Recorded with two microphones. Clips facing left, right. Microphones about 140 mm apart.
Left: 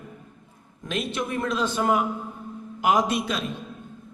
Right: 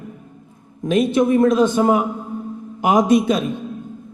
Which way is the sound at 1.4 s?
50° right (ahead or behind).